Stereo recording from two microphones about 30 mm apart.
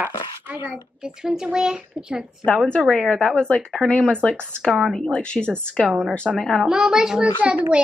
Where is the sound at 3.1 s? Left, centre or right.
Left.